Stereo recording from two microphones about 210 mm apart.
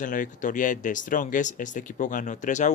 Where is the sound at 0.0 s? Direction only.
40° left (ahead or behind).